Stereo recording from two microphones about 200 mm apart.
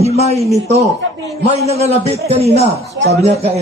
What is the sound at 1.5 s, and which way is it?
Speech, 30° right (ahead or behind).